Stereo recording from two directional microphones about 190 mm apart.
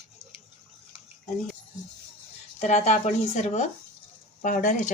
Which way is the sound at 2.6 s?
35° left (ahead or behind).